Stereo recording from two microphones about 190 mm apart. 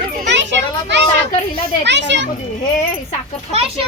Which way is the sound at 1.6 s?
65° right (ahead or behind).